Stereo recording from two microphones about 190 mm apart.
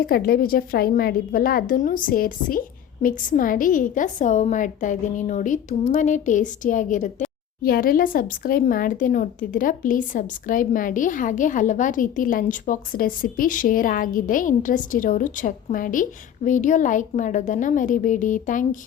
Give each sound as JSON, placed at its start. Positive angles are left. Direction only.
{"t": 0.0, "sound": "a woman's voice", "side_deg": 50}